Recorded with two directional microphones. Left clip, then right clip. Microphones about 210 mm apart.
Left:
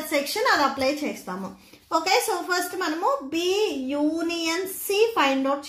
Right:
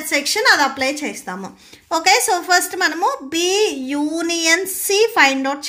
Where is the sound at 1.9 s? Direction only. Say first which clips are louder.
Right 7 dB; 50° right (ahead or behind).